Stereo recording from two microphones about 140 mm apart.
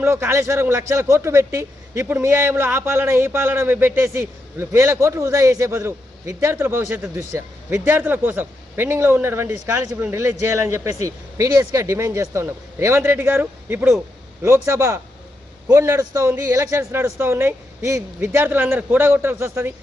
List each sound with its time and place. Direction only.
0.0 s a man's voice: 20° right (ahead or behind)